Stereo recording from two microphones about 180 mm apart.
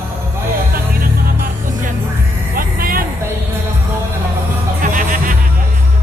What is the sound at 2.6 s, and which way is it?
Music, 55° right (ahead or behind).